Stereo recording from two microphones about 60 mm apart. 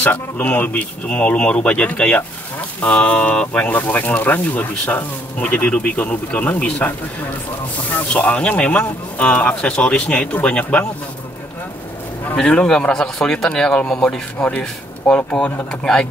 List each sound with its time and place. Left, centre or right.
0.0 s speech: left
12.4 s speech: centre